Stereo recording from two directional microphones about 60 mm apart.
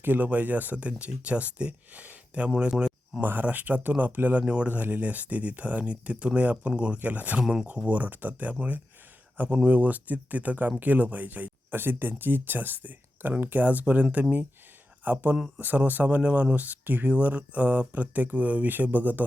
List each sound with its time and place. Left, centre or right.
0.0 s speech: right
3.2 s speech: right